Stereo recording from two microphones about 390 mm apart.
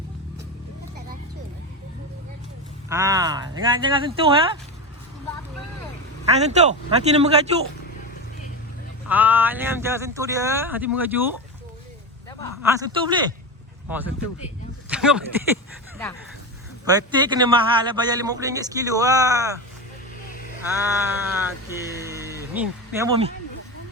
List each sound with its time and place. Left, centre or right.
2.9 s a man's voice: centre
6.4 s a man's voice: centre
9.0 s speech: centre
12.6 s a man's voice: centre
16.8 s a man's voice: centre
20.8 s speech: centre
22.0 s a sound: centre